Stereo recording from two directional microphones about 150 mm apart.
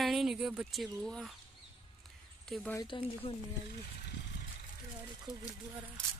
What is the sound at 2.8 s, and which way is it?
Speech, 35° left (ahead or behind).